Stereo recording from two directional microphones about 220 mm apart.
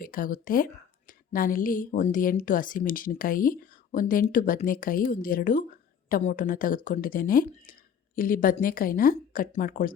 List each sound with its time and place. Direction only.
0.0 s a woman's voice: 40° left (ahead or behind)